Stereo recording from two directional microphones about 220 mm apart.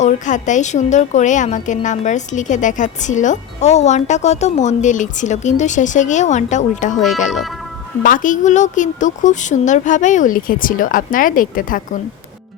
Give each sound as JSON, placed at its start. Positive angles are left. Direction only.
{"t": 0.0, "sound": "a woman's voice", "side_deg": 35}